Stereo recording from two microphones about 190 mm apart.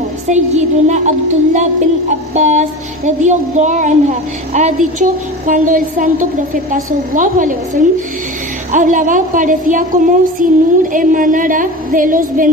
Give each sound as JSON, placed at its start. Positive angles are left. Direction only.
{"t": 0.3, "sound": "a woman's voice", "side_deg": -35}